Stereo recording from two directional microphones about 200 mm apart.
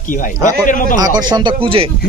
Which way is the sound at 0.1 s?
40° left (ahead or behind).